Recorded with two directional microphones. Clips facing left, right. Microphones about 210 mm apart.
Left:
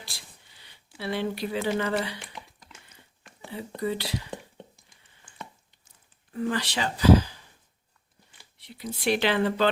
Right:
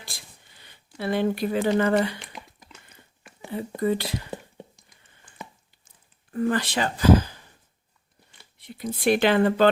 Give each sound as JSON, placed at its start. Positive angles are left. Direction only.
{"t": 0.0, "sound": "a sound", "side_deg": -50}
{"t": 0.9, "sound": "speech", "side_deg": -50}
{"t": 3.8, "sound": "speech", "side_deg": -50}
{"t": 6.3, "sound": "speech", "side_deg": -50}
{"t": 8.5, "sound": "speech", "side_deg": -50}